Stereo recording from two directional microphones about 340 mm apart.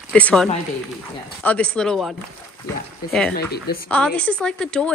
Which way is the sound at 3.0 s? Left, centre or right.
Left.